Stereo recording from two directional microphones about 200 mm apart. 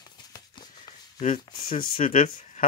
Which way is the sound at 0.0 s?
20° left (ahead or behind).